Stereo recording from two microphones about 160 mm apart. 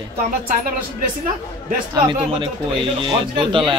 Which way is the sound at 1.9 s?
30° right (ahead or behind).